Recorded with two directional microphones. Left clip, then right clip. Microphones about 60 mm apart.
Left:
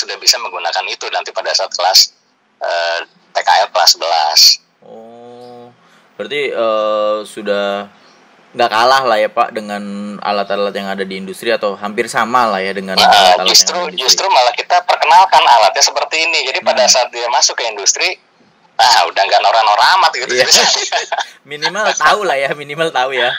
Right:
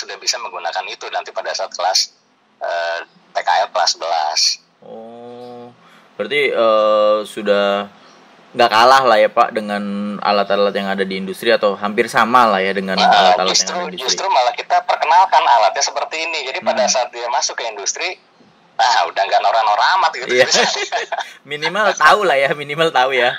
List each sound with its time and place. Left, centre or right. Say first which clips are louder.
0.0 s speech: left 8 dB; left
6.1 s a man's voice: right 1 dB; left
12.9 s speech: left 4 dB; left
22.0 s speech: right 1 dB; centre